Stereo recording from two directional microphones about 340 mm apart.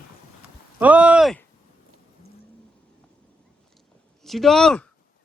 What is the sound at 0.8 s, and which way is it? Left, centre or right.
Speech, centre.